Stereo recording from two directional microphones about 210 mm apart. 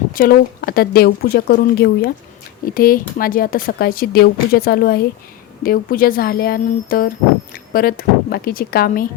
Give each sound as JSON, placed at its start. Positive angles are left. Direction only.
{"t": 0.1, "sound": "speech", "side_deg": 45}